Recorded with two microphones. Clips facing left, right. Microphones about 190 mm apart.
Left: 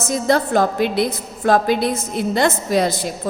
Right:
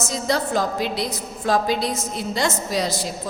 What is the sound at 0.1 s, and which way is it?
A woman's voice, 55° left (ahead or behind).